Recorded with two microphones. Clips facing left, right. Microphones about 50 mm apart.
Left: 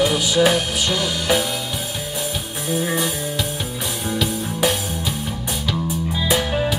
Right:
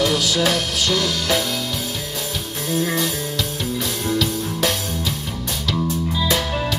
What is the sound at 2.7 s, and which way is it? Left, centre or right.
Music, centre.